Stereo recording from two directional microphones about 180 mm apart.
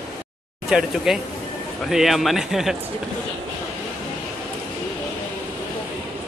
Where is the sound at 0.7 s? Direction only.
5° right (ahead or behind).